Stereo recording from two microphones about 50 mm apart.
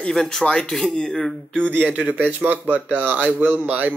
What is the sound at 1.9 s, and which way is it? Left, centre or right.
Speech, right.